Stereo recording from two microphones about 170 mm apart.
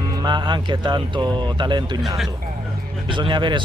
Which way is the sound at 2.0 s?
Centre (ahead or behind).